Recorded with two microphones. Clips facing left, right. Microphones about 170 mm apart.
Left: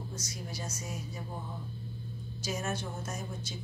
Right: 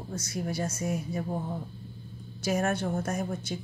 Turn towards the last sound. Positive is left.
turn(degrees=-60)  # may be behind; listen again after turning